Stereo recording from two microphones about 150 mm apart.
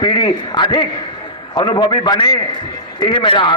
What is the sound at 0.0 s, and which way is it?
A man's voice, 35° left (ahead or behind).